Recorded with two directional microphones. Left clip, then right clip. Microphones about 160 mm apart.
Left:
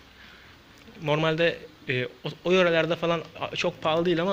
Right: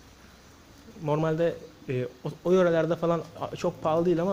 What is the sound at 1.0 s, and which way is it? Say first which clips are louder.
Speech: left 2 dB; 10° right (ahead or behind).